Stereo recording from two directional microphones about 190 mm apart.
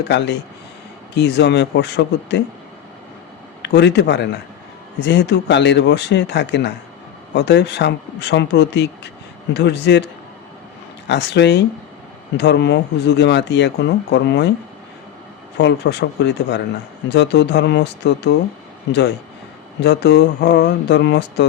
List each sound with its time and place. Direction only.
0.1 s speech: 65° left (ahead or behind)
3.6 s speech: 65° left (ahead or behind)
11.1 s speech: 65° left (ahead or behind)
15.5 s speech: 65° left (ahead or behind)